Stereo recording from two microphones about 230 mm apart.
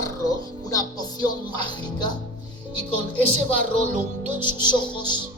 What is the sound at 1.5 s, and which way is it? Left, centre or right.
Child singing, centre.